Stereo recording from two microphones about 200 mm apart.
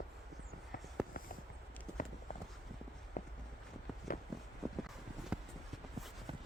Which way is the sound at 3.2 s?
40° left (ahead or behind).